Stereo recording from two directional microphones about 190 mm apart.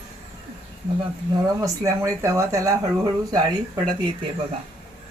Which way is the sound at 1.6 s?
15° right (ahead or behind).